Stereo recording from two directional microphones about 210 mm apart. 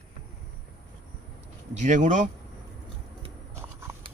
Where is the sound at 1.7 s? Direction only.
35° right (ahead or behind).